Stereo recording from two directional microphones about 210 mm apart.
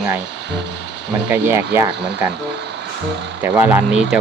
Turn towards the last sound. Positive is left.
turn(degrees=-5)  # may be behind; listen again after turning